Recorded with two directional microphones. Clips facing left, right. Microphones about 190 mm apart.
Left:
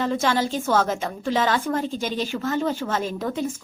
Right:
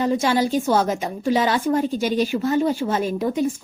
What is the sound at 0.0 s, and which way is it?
A woman's voice, 15° right (ahead or behind).